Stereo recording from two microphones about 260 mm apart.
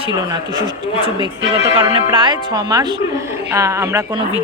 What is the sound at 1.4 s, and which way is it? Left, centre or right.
Speech, right.